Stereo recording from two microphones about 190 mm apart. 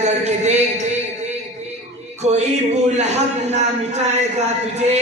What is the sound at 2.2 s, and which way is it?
Speech, 35° right (ahead or behind).